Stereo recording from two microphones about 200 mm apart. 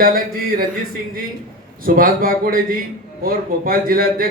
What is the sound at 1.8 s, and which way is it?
Speech, 45° right (ahead or behind).